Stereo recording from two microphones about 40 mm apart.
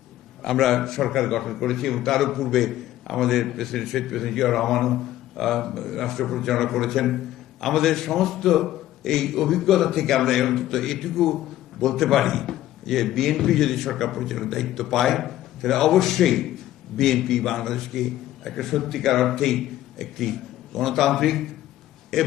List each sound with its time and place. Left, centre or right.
0.4 s a man's voice: centre